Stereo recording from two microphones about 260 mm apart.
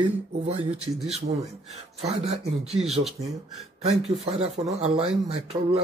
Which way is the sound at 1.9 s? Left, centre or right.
Right.